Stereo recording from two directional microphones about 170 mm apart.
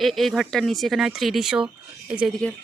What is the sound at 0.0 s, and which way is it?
Speech, centre (ahead or behind).